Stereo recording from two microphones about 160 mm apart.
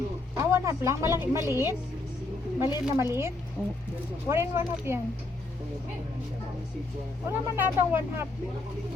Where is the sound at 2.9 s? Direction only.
15° right (ahead or behind).